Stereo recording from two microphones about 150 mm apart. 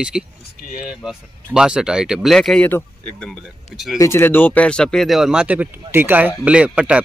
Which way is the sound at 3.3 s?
Centre (ahead or behind).